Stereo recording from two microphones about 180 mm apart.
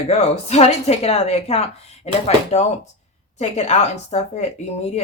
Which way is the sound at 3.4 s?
35° left (ahead or behind).